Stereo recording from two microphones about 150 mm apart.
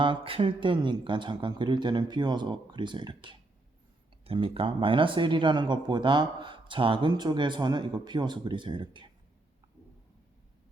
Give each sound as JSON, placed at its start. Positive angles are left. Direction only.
{"t": 0.0, "sound": "speech", "side_deg": -35}